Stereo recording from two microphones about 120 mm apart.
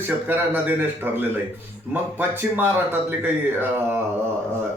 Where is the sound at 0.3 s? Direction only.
15° right (ahead or behind).